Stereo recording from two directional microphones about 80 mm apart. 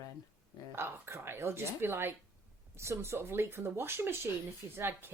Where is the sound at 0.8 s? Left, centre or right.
Right.